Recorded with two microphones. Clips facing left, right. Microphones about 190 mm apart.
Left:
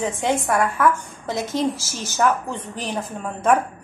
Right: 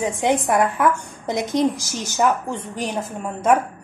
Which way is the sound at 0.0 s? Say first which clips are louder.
Right 2 dB; 15° right (ahead or behind).